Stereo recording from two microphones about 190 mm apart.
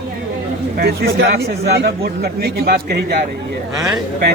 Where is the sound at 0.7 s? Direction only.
55° right (ahead or behind).